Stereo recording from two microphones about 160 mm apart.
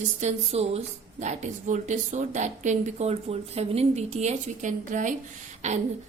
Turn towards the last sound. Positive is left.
turn(degrees=-45)  # may be behind; listen again after turning